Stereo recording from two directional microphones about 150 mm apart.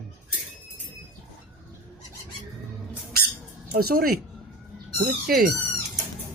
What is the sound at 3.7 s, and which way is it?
Speech, 80° right.